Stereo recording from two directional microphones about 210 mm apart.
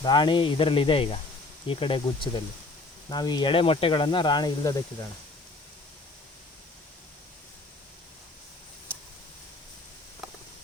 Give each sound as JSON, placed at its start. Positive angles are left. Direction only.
{"t": 0.0, "sound": "speech", "side_deg": 20}